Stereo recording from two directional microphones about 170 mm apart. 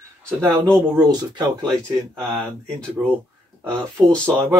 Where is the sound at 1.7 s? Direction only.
5° left (ahead or behind).